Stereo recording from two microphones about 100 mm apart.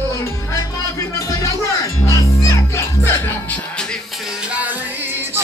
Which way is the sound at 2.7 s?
30° left (ahead or behind).